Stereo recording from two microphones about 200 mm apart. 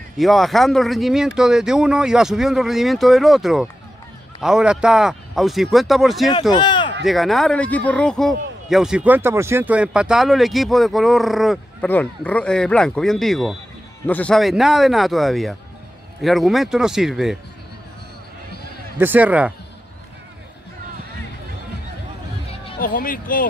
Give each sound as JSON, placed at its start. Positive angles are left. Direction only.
{"t": 0.2, "sound": "a man's voice", "side_deg": 0}
{"t": 6.5, "sound": "a sound", "side_deg": 20}
{"t": 7.1, "sound": "a man's voice", "side_deg": 0}
{"t": 18.9, "sound": "speech", "side_deg": -10}
{"t": 22.8, "sound": "speech", "side_deg": 45}